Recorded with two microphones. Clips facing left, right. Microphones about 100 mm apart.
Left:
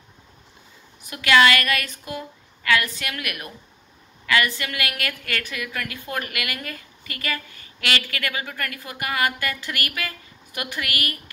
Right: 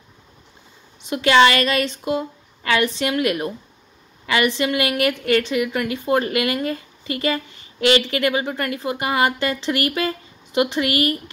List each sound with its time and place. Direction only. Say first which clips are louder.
1.0 s a woman's voice: right 3 dB; 25° right (ahead or behind)